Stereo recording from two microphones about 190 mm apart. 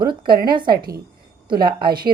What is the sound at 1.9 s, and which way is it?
Speech, 50° right (ahead or behind).